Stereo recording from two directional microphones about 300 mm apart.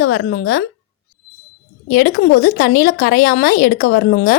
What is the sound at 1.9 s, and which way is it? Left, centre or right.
Speech, left.